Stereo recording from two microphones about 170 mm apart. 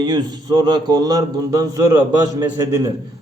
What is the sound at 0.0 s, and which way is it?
A man's voice, 25° right (ahead or behind).